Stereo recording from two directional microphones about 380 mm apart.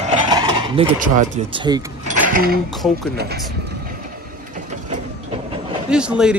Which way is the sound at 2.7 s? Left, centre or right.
Centre.